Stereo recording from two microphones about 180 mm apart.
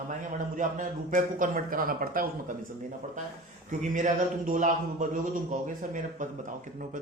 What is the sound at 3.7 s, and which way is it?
Speech, 45° right (ahead or behind).